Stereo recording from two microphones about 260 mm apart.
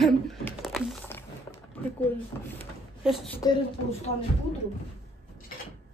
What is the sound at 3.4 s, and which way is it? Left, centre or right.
Speech, centre.